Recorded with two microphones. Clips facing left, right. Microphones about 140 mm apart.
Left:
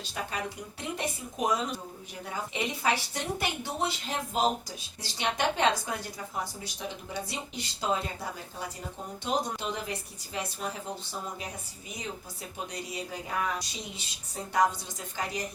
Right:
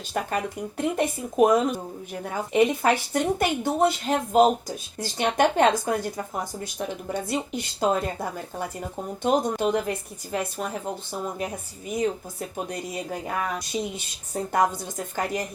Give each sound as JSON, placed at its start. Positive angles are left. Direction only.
{"t": 0.1, "sound": "speech", "side_deg": -50}
{"t": 11.9, "sound": "speech", "side_deg": -50}